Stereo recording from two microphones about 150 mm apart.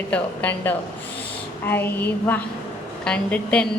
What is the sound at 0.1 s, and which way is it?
A woman's voice, 10° left (ahead or behind).